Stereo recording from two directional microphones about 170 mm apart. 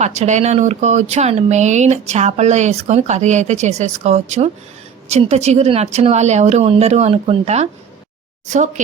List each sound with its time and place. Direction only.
0.0 s a woman's voice: 40° right (ahead or behind)